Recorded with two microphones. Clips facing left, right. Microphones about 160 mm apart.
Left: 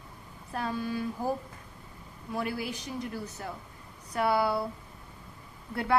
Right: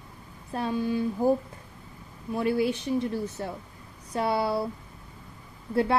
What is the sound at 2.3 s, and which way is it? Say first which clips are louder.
A woman's voice: right 8 dB; 25° right (ahead or behind).